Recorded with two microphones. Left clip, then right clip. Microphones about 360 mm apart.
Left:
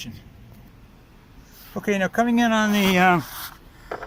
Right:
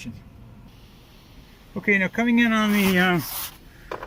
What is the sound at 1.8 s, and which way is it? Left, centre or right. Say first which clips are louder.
Speech: even; left.